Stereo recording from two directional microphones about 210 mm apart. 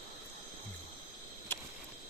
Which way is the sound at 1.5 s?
10° left (ahead or behind).